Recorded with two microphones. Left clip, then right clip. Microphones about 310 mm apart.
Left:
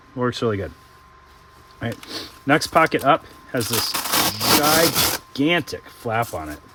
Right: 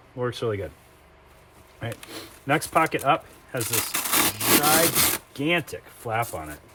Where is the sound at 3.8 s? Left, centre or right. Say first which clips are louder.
Left 2 dB; centre.